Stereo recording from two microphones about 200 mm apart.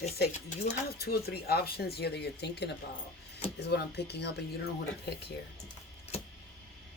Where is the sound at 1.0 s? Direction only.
50° left (ahead or behind).